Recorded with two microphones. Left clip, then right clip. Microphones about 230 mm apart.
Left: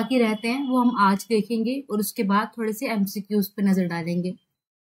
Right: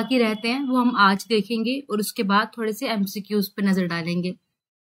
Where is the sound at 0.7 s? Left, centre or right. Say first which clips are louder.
Left 1 dB; right.